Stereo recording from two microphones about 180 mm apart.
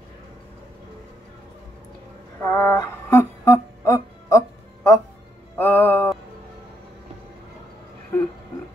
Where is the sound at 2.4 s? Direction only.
15° left (ahead or behind).